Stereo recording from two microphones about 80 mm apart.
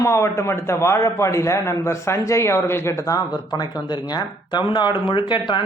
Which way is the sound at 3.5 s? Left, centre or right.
Left.